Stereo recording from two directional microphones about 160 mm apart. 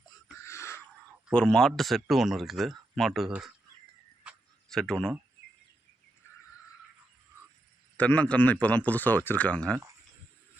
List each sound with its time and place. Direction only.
0.4 s a sound: 15° left (ahead or behind)
1.3 s speech: 5° left (ahead or behind)
4.2 s tick-tock: centre (ahead or behind)
7.9 s speech: 10° left (ahead or behind)